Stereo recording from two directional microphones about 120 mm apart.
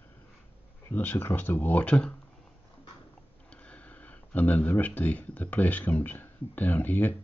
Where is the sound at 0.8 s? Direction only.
15° left (ahead or behind).